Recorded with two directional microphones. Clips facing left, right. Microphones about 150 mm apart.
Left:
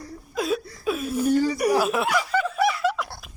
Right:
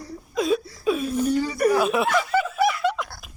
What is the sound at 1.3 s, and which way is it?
Chuckle, 45° left (ahead or behind).